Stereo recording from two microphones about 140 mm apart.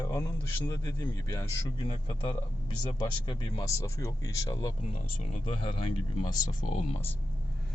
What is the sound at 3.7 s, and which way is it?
Speech, 20° left (ahead or behind).